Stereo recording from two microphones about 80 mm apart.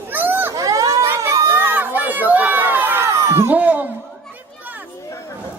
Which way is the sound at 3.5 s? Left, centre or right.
Centre.